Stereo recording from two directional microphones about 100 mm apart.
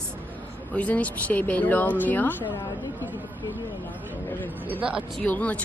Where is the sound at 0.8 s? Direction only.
15° left (ahead or behind).